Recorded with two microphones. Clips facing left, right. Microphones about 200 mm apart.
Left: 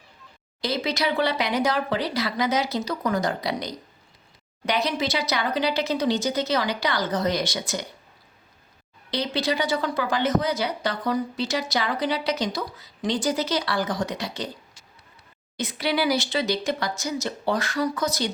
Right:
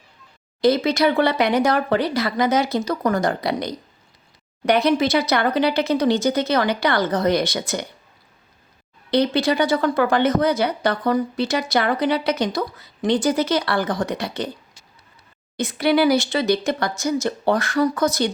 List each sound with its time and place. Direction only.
0.6 s speech: 50° right (ahead or behind)
9.0 s speech: 55° right (ahead or behind)
15.5 s speech: 50° right (ahead or behind)